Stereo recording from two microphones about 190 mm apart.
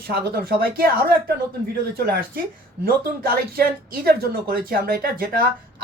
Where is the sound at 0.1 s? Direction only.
55° right (ahead or behind).